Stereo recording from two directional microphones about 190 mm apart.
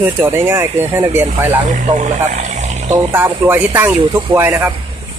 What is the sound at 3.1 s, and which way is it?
Speech, 10° right (ahead or behind).